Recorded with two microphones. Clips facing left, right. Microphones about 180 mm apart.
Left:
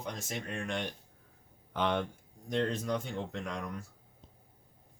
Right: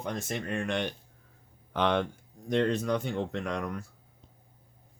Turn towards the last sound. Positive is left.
turn(degrees=-65)  # may be behind; listen again after turning